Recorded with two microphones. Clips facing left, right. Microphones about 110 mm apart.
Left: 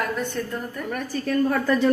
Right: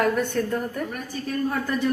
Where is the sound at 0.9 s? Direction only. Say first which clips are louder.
Left 5 dB; 70° left (ahead or behind).